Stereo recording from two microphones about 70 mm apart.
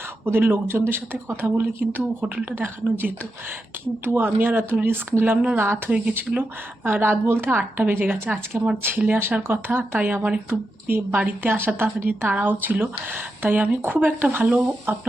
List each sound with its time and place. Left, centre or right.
0.3 s a woman's voice: right
4.0 s speech: right
5.9 s a woman's voice: right